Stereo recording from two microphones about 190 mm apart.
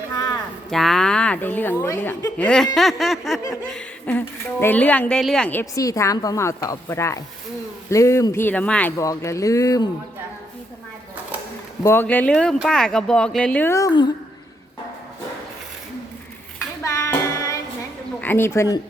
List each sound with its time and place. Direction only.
0.7 s a woman's voice: centre (ahead or behind); by 9.9 s 20° left (ahead or behind)
11.8 s a woman's voice: 10° left (ahead or behind)
16.8 s child singing: 15° left (ahead or behind)
18.2 s speech: 10° left (ahead or behind)